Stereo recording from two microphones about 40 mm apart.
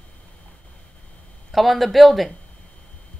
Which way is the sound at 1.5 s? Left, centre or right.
Centre.